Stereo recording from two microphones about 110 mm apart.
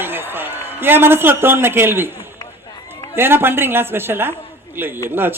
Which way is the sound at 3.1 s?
20° right (ahead or behind).